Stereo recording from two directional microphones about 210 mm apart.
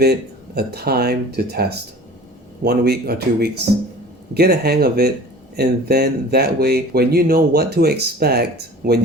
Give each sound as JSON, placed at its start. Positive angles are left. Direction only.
{"t": 0.0, "sound": "speech", "side_deg": -50}